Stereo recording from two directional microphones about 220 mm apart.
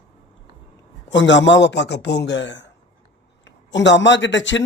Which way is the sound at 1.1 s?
55° left (ahead or behind).